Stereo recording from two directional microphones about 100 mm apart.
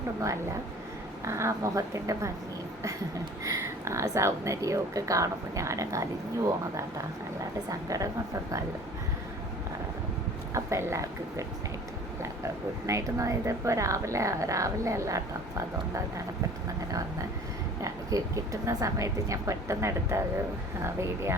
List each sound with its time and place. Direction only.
1.2 s speech: 30° right (ahead or behind)
3.4 s speech: 30° right (ahead or behind)
10.5 s speech: 25° right (ahead or behind)
12.8 s speech: 30° right (ahead or behind)
17.8 s speech: 35° right (ahead or behind)